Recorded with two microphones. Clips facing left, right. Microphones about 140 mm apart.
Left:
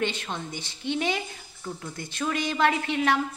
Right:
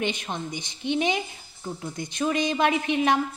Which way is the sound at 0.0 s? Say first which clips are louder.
Right 1 dB; 15° right (ahead or behind).